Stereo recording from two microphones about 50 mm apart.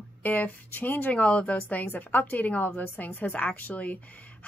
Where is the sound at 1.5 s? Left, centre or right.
Left.